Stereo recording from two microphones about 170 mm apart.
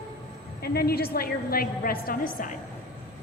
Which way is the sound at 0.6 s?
65° left (ahead or behind).